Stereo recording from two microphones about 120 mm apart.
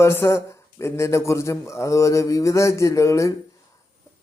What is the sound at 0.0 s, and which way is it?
Speech, 20° left (ahead or behind).